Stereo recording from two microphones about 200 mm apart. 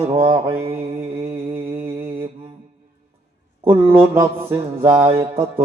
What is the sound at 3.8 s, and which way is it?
Mantra, 25° right (ahead or behind).